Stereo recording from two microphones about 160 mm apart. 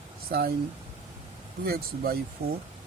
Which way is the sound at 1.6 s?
70° right (ahead or behind).